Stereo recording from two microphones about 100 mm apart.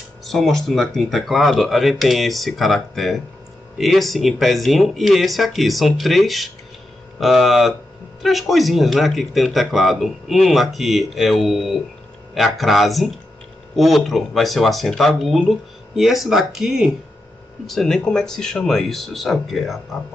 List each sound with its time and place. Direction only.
0.2 s speech: centre (ahead or behind)